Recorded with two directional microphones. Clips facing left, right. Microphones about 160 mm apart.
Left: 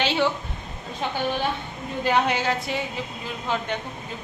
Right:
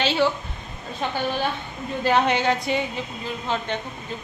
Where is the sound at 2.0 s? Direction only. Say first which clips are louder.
Right 2 dB; 5° left (ahead or behind).